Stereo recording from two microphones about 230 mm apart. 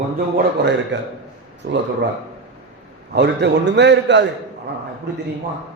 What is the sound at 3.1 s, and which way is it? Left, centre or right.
A man's voice, right.